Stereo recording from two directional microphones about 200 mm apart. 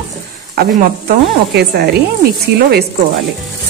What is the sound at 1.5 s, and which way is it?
Speech, 50° right (ahead or behind).